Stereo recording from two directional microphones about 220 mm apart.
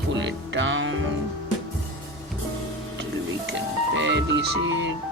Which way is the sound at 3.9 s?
55° right (ahead or behind).